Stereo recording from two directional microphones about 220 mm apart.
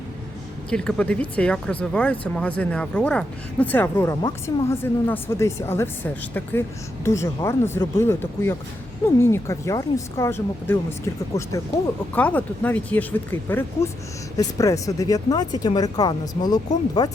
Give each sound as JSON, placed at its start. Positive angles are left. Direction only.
{"t": 0.7, "sound": "speech", "side_deg": 5}